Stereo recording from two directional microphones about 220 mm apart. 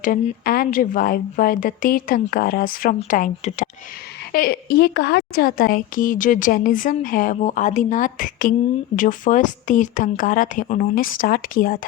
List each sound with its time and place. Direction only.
0.0 s a woman's voice: 40° left (ahead or behind)